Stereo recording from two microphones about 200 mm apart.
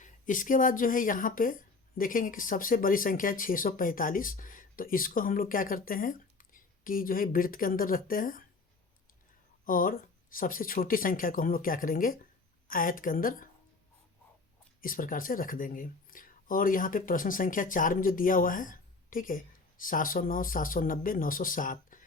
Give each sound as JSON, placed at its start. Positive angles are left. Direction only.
{"t": 0.0, "sound": "speech", "side_deg": 40}
{"t": 9.6, "sound": "speech", "side_deg": 45}
{"t": 14.8, "sound": "speech", "side_deg": 45}